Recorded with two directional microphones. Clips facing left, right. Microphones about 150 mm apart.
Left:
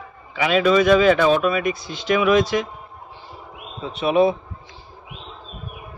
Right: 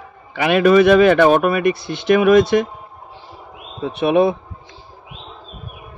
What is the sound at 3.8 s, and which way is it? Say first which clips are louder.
Speech: right 3 dB; 60° right (ahead or behind).